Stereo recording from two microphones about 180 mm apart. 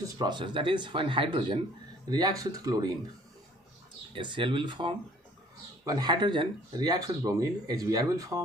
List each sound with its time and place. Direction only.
0.2 s speech: 25° right (ahead or behind)
4.1 s speech: 25° right (ahead or behind)